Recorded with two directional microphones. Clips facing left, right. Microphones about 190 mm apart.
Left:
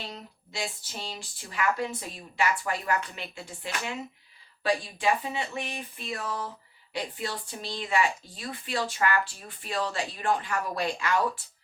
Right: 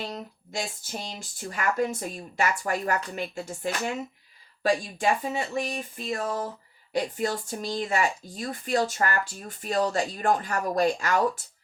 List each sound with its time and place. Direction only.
0.1 s speech: 45° right (ahead or behind)